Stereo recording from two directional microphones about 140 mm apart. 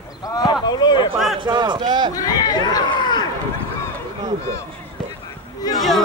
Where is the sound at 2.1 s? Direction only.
25° left (ahead or behind).